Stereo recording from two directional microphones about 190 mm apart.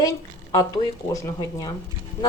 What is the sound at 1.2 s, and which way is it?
Speech, 20° left (ahead or behind).